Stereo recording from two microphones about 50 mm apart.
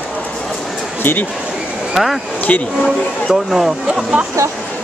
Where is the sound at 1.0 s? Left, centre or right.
Left.